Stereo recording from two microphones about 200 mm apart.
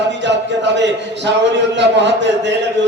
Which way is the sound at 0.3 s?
60° right (ahead or behind).